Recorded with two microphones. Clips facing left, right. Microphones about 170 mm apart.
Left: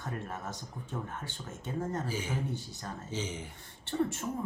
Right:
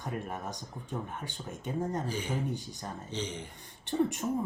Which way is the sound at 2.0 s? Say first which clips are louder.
Right 1 dB; 5° left (ahead or behind).